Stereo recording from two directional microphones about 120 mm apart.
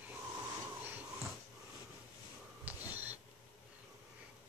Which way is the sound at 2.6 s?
15° right (ahead or behind).